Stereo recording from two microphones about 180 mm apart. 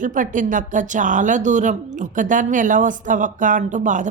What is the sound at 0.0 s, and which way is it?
Speech, 45° right (ahead or behind).